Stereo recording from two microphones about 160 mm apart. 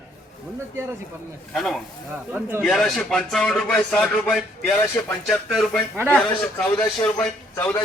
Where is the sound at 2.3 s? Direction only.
15° right (ahead or behind).